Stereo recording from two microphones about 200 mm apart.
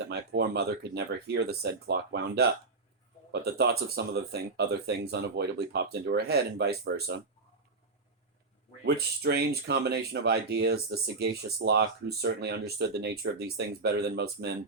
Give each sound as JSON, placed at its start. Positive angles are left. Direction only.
{"t": 0.1, "sound": "speech", "side_deg": -55}
{"t": 9.0, "sound": "speech", "side_deg": -55}